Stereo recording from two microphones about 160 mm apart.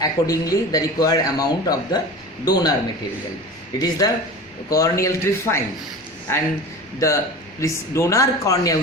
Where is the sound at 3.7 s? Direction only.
25° left (ahead or behind).